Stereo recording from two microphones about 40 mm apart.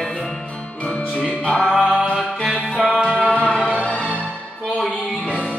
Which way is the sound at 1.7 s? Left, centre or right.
Centre.